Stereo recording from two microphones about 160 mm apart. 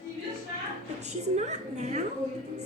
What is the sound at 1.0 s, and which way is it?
Speech, 45° right (ahead or behind).